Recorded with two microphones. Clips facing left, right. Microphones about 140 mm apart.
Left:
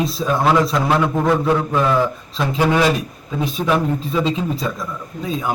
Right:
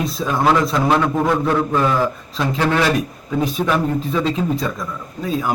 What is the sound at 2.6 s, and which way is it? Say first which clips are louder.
Speech: left 2 dB; 15° left (ahead or behind).